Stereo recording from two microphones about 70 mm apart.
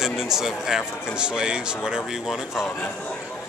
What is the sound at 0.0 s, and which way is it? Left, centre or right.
A man's voice, centre.